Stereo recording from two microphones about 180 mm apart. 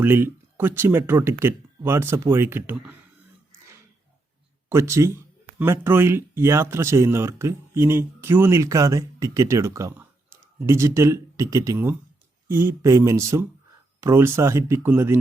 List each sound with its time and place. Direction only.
0.0 s speech: 10° right (ahead or behind)
4.7 s speech: 15° right (ahead or behind)